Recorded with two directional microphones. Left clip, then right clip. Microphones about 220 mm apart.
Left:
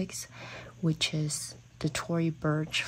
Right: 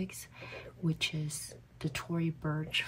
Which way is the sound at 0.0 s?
35° left (ahead or behind).